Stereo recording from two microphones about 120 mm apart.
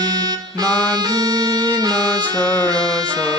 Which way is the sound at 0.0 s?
35° right (ahead or behind).